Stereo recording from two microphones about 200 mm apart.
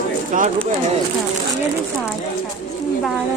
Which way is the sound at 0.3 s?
40° right (ahead or behind).